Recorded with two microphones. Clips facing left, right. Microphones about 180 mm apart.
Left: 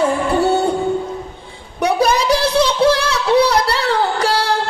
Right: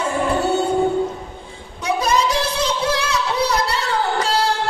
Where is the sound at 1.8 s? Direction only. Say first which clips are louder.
Left 4 dB; 65° left (ahead or behind).